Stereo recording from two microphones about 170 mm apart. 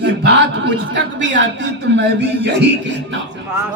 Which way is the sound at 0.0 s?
90° right.